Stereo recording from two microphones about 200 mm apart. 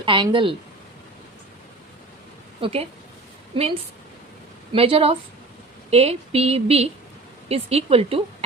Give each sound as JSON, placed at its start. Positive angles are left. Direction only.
{"t": 0.0, "sound": "speech", "side_deg": -25}
{"t": 2.6, "sound": "speech", "side_deg": -30}
{"t": 4.7, "sound": "speech", "side_deg": -30}